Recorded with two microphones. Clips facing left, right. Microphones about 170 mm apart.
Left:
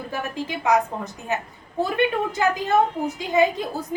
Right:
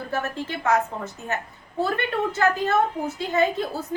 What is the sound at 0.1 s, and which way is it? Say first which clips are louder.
A woman's voice: right 1 dB; 15° left (ahead or behind).